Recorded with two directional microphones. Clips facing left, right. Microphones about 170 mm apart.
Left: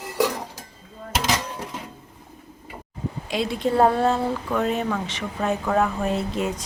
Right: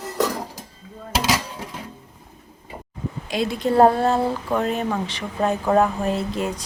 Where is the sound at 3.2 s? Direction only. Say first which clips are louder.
Right 2 dB; 45° right (ahead or behind).